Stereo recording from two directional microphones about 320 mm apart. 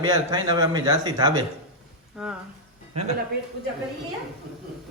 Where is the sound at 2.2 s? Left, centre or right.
Centre.